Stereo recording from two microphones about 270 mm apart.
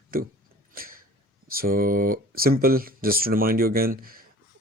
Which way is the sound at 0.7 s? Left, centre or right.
Right.